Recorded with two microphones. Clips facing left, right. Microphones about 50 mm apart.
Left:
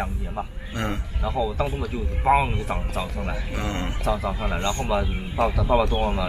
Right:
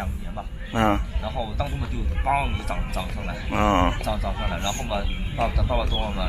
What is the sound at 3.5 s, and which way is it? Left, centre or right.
Speech, right.